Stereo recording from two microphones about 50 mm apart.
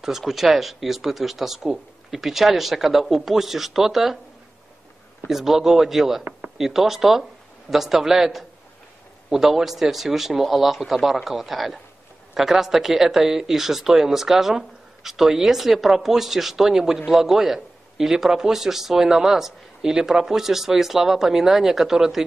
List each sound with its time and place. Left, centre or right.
0.3 s speech: centre
5.3 s a man's voice: centre